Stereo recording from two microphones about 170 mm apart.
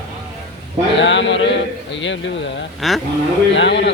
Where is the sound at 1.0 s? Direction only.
90° left.